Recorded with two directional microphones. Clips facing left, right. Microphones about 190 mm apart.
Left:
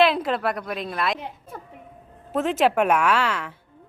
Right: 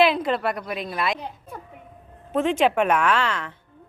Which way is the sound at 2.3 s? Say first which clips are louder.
Even; centre (ahead or behind).